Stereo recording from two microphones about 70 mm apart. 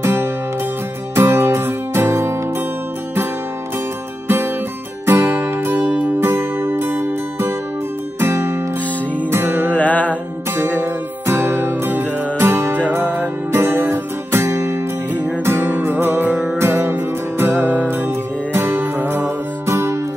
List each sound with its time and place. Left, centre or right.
0.0 s music: right
5.0 s music: right
5.8 s music: right
9.7 s music: left
10.5 s music: right
12.7 s music: right
19.6 s music: right